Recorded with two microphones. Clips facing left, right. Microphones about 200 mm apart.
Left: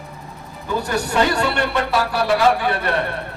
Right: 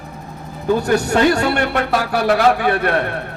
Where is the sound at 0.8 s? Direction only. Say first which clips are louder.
Right 3 dB; 45° right (ahead or behind).